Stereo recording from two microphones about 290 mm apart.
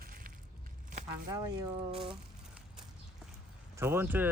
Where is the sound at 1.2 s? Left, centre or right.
Centre.